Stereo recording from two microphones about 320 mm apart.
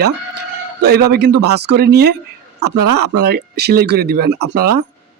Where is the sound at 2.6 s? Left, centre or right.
Right.